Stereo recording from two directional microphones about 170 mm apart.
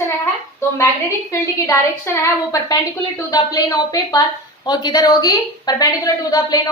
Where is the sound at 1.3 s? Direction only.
15° left (ahead or behind).